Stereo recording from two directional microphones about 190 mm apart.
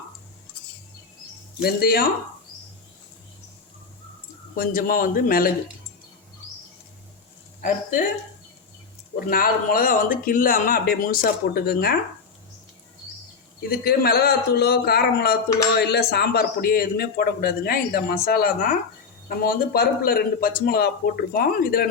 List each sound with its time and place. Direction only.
1.6 s a man's voice: 55° left (ahead or behind)
4.5 s a man's voice: 50° left (ahead or behind)
7.6 s a man's voice: 45° left (ahead or behind)
9.3 s a man's voice: 50° left (ahead or behind)
13.6 s a man's voice: 55° left (ahead or behind)